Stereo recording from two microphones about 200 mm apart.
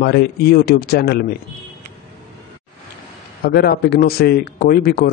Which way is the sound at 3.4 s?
50° left (ahead or behind).